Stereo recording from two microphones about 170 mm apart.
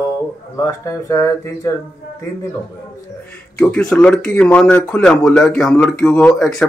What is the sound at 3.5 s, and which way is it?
A man's voice, 5° left (ahead or behind).